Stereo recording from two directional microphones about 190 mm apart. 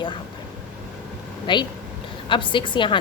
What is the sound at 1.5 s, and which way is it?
A woman's voice, 25° left (ahead or behind).